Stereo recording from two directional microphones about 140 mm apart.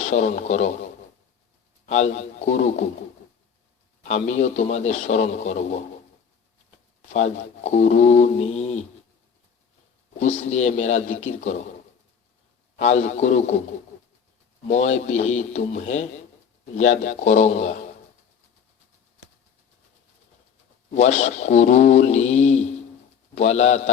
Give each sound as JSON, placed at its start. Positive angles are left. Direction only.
{"t": 0.0, "sound": "speech", "side_deg": 55}
{"t": 1.9, "sound": "speech", "side_deg": 55}
{"t": 4.1, "sound": "speech", "side_deg": 55}
{"t": 7.1, "sound": "speech", "side_deg": 55}
{"t": 10.2, "sound": "speech", "side_deg": 55}
{"t": 12.7, "sound": "speech", "side_deg": 55}
{"t": 14.7, "sound": "speech", "side_deg": 55}
{"t": 20.9, "sound": "a man's voice", "side_deg": 55}